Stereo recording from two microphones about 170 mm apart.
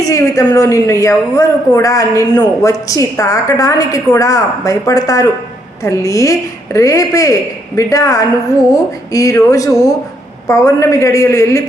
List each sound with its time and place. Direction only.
0.0 s a woman's voice: 20° left (ahead or behind)